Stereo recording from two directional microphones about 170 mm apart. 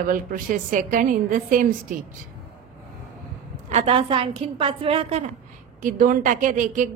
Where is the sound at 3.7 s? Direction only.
40° right (ahead or behind).